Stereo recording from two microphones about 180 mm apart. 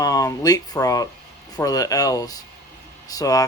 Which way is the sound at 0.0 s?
20° left (ahead or behind).